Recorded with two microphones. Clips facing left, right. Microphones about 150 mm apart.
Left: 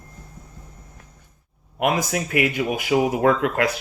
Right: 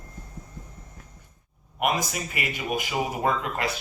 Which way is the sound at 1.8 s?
75° left (ahead or behind).